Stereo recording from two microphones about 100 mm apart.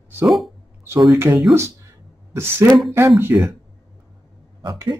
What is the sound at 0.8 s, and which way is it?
Speech, 25° right (ahead or behind).